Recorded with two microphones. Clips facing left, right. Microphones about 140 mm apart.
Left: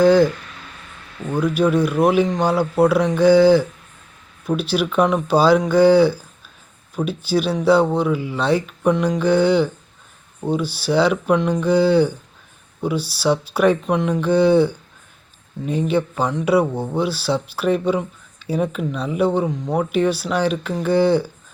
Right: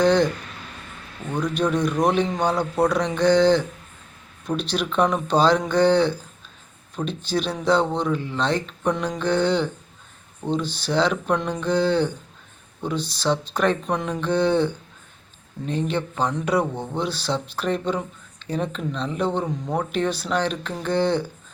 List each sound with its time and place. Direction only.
0.0 s speech: 5° left (ahead or behind)
1.3 s speech: 5° left (ahead or behind)